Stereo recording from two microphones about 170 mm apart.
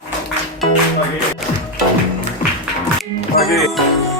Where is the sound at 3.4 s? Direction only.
Centre (ahead or behind).